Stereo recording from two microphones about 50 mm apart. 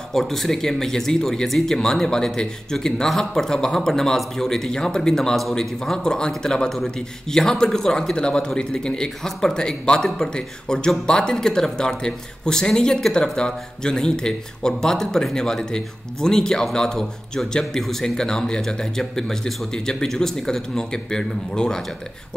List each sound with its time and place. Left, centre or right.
0.1 s speech: centre